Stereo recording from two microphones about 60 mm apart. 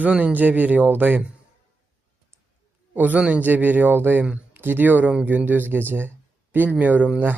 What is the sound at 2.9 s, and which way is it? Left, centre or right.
A man's voice, right.